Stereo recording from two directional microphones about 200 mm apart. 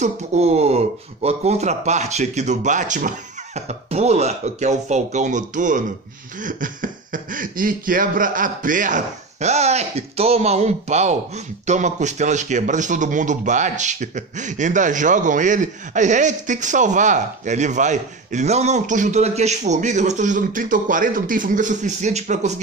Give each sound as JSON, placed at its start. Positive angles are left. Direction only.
{"t": 0.0, "sound": "speech", "side_deg": -35}